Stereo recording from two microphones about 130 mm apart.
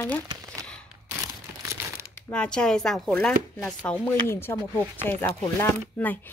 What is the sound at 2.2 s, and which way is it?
Speech, 10° left (ahead or behind).